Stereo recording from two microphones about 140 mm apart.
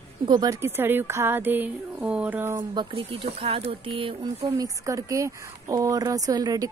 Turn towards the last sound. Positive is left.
turn(degrees=-25)  # may be behind; listen again after turning